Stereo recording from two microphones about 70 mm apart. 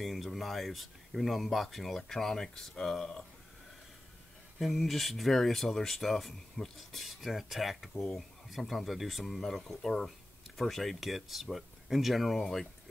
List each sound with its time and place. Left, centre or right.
0.0 s speech: centre
4.6 s speech: centre